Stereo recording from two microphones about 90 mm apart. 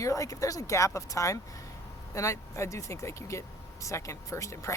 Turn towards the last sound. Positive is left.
turn(degrees=35)  # may be behind; listen again after turning